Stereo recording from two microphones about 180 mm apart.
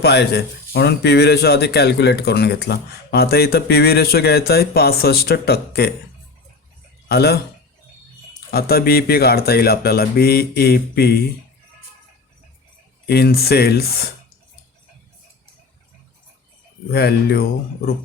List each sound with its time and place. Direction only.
0.0 s a man's voice: 65° left (ahead or behind)
7.1 s a man's voice: 65° left (ahead or behind)
8.4 s a man's voice: 60° left (ahead or behind)
13.1 s a man's voice: 60° left (ahead or behind)
16.9 s a man's voice: 65° left (ahead or behind)